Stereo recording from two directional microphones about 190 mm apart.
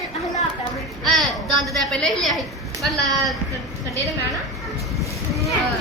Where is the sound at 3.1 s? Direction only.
20° right (ahead or behind).